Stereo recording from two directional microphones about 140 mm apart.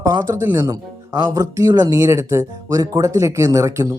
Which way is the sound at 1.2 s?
25° right (ahead or behind).